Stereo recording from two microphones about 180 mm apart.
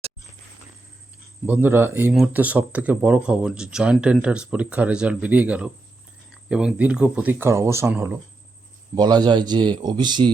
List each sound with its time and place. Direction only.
1.5 s speech: 10° right (ahead or behind)
9.0 s a man's voice: 25° right (ahead or behind)